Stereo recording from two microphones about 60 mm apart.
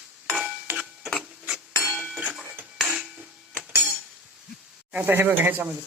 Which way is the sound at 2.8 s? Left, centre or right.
Centre.